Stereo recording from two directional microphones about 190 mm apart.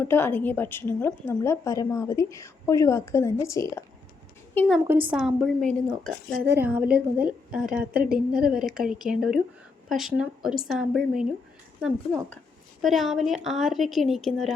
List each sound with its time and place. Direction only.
0.0 s a woman's voice: 10° left (ahead or behind)
6.6 s a woman's voice: 10° right (ahead or behind)